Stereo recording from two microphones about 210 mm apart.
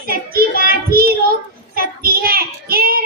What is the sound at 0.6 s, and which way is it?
Child singing, 45° right (ahead or behind).